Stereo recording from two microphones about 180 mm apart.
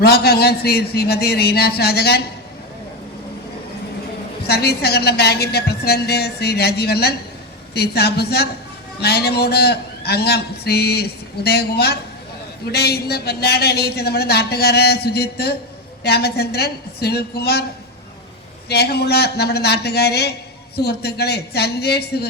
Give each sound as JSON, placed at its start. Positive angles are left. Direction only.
{"t": 0.0, "sound": "a man's voice", "side_deg": 60}
{"t": 4.4, "sound": "a man's voice", "side_deg": 60}
{"t": 18.7, "sound": "a man's voice", "side_deg": 65}